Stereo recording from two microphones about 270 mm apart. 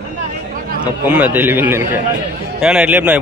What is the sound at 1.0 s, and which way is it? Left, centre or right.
A man's voice, centre.